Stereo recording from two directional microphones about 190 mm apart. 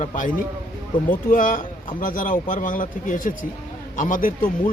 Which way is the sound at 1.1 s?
45° left (ahead or behind).